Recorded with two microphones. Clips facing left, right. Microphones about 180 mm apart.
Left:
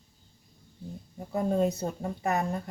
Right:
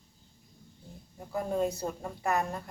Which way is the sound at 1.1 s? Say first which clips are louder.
Left 4 dB; 25° left (ahead or behind).